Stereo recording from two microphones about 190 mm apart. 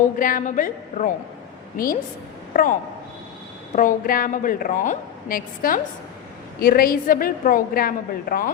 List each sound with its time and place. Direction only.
0.2 s a woman's voice: 45° left (ahead or behind)
3.8 s a woman's voice: 45° left (ahead or behind)